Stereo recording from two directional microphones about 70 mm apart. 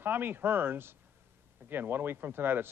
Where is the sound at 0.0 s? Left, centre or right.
Right.